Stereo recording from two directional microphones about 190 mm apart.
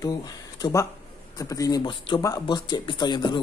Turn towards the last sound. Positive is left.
turn(degrees=20)  # may be behind; listen again after turning